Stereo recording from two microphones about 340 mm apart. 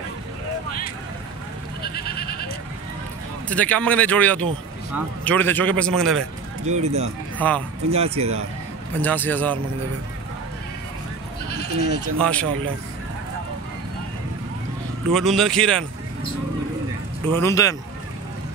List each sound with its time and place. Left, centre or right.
1.8 s goat: left
3.4 s speech: centre
6.6 s speech: centre
7.3 s speech: centre
7.9 s speech: centre
9.0 s speech: centre
12.2 s speech: centre
15.0 s speech: centre
17.3 s a man's voice: centre